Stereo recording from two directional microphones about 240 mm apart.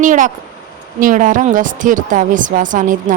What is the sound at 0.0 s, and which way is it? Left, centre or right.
A woman's voice, right.